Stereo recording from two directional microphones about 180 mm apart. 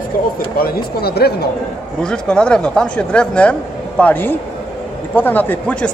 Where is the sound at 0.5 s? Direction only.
55° left (ahead or behind).